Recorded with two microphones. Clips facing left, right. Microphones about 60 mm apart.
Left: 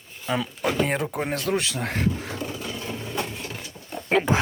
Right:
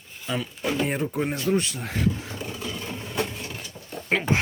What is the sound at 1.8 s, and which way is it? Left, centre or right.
Speech, left.